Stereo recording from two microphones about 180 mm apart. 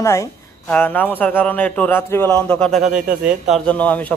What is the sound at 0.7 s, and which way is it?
Speech, 10° left (ahead or behind).